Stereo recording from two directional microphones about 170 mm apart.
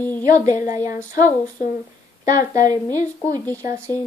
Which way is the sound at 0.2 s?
20° right (ahead or behind).